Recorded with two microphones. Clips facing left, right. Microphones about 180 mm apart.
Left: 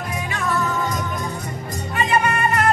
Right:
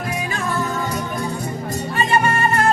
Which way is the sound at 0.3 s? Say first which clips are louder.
Left 3 dB; 25° right (ahead or behind).